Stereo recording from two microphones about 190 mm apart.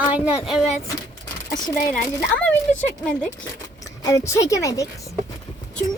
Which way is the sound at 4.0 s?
15° left (ahead or behind).